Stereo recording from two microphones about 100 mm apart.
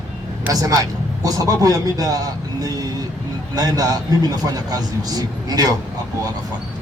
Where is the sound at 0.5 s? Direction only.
35° right (ahead or behind).